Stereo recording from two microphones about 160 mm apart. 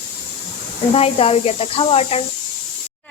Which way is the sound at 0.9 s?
35° left (ahead or behind).